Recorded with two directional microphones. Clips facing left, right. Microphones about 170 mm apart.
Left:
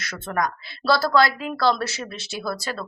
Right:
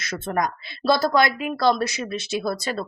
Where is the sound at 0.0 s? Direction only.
20° right (ahead or behind).